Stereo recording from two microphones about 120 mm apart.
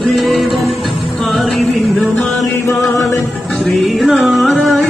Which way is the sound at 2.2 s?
25° left (ahead or behind).